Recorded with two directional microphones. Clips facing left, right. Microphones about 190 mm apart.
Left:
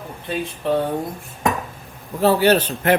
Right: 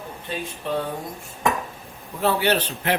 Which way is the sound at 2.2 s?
40° left (ahead or behind).